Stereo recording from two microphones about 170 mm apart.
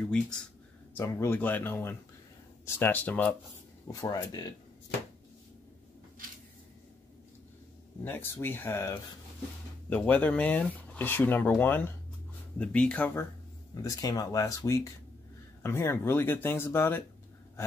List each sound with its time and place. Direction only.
0.9 s speech: 15° left (ahead or behind)
3.8 s speech: 20° left (ahead or behind)
8.0 s speech: 15° left (ahead or behind)